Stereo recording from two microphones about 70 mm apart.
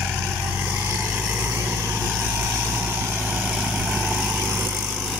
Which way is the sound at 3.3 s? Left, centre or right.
Right.